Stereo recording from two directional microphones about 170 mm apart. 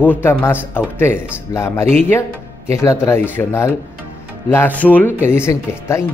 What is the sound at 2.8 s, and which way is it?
Speech, 15° left (ahead or behind).